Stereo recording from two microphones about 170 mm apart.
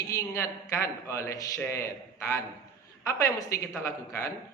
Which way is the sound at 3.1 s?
20° left (ahead or behind).